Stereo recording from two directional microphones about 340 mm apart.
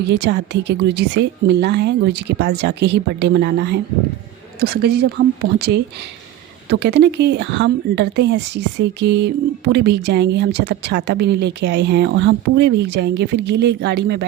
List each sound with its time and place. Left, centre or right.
0.0 s speech: right